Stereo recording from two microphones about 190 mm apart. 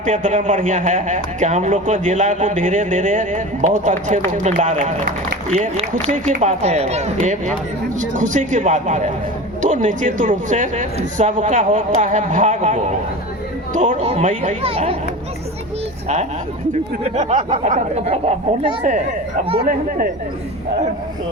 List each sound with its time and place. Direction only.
0.0 s a man's voice: 45° right (ahead or behind)
14.0 s speech: 30° right (ahead or behind)
17.0 s speech: 35° right (ahead or behind)